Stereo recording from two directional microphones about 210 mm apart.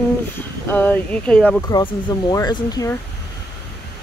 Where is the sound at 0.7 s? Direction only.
5° left (ahead or behind).